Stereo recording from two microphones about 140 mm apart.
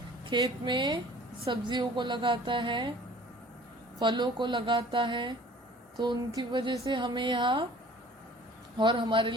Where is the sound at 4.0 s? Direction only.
30° right (ahead or behind).